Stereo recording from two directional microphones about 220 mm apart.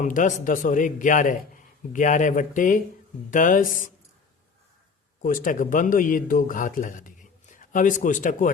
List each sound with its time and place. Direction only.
0.0 s a man's voice: 35° left (ahead or behind)
5.2 s speech: 40° left (ahead or behind)